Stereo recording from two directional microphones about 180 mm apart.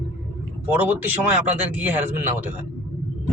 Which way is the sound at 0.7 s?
10° right (ahead or behind).